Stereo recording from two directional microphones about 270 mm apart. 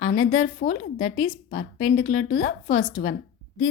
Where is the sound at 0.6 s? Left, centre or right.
Left.